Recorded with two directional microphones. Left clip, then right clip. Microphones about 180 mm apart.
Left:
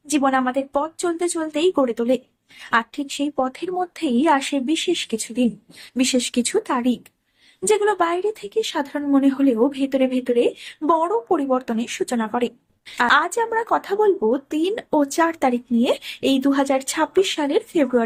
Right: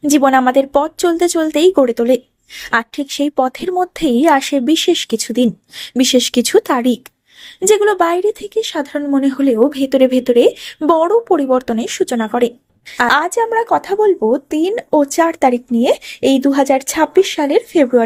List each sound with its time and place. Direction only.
0.1 s speech: 40° right (ahead or behind)